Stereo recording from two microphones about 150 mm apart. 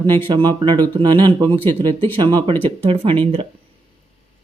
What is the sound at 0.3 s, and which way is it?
Speech, 30° right (ahead or behind).